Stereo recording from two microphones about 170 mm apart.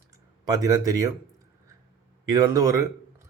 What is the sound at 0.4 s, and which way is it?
Speech, 20° right (ahead or behind).